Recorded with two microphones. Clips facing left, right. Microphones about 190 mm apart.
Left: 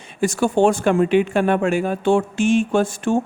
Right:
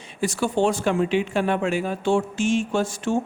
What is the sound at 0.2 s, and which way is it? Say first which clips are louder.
Speech: left 5 dB; 50° left (ahead or behind).